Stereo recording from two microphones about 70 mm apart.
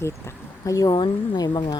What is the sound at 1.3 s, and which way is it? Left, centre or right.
Speech, left.